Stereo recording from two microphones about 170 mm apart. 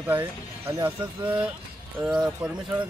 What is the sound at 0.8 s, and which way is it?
Speech, 10° right (ahead or behind).